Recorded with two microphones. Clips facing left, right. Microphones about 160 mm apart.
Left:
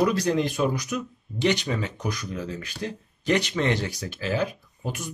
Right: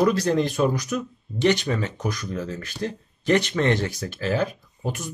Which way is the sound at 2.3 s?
15° left (ahead or behind).